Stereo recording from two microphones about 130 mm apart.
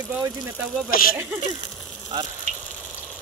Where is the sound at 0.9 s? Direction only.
90° left.